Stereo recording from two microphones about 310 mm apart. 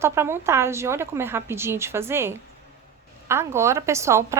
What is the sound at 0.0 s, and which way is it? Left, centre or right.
A woman's voice, centre.